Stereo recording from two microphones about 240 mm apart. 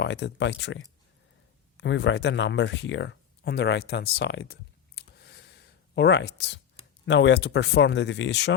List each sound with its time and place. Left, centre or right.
0.0 s speech: left
4.9 s a sound: left
7.0 s speech: left